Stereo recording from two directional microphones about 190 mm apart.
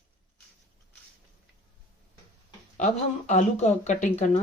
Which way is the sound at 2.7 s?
40° left (ahead or behind).